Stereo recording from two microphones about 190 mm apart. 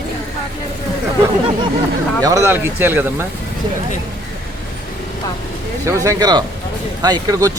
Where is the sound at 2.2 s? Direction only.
15° right (ahead or behind).